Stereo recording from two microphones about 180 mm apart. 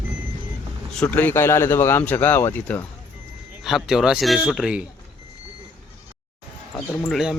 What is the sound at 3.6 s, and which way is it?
Speech, centre (ahead or behind).